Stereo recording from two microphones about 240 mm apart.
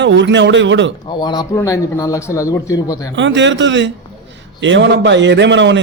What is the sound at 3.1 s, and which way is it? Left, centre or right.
Speech, right.